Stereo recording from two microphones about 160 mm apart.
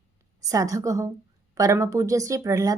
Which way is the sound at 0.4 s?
20° right (ahead or behind).